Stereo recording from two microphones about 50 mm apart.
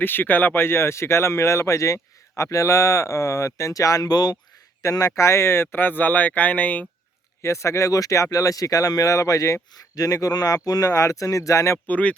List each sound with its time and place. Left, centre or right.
0.0 s speech: left
0.6 s speech: left
7.4 s speech: left
10.6 s speech: left
11.9 s speech: left